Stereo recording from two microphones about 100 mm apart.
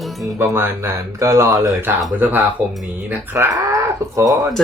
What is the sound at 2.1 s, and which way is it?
Speech, 20° right (ahead or behind).